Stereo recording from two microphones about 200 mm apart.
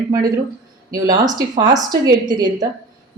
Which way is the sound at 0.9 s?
20° right (ahead or behind).